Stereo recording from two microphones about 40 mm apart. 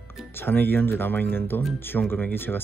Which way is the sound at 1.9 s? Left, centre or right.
Left.